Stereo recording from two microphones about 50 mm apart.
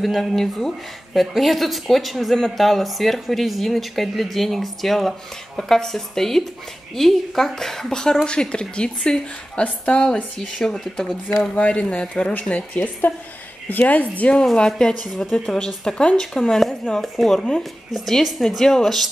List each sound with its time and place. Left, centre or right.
0.0 s speech: centre; by 10.2 s left
10.4 s speech: centre
11.5 s a woman's voice: left
14.3 s speech: centre